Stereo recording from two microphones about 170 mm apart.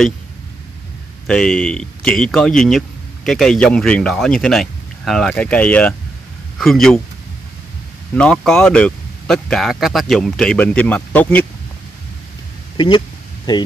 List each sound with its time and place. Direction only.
1.2 s speech: 5° left (ahead or behind)
8.2 s speech: 5° left (ahead or behind)
12.7 s speech: 30° left (ahead or behind)